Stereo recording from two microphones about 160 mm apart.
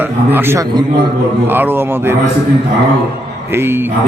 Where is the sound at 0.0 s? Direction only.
10° right (ahead or behind).